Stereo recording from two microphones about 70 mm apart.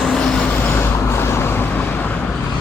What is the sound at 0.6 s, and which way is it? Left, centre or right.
Vehicle, left.